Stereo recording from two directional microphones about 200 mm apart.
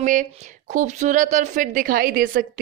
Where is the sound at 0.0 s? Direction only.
40° right (ahead or behind).